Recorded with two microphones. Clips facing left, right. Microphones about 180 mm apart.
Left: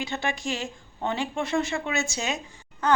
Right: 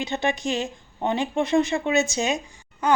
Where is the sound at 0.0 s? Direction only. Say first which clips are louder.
Right 5 dB; 20° right (ahead or behind).